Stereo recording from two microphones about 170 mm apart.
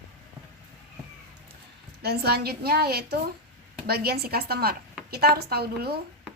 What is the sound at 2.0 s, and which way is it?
A woman's voice, 70° right (ahead or behind).